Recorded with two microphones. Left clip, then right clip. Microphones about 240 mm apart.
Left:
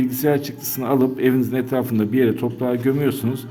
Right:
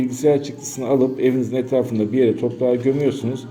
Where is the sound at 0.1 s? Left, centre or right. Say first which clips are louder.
Right 3 dB; left.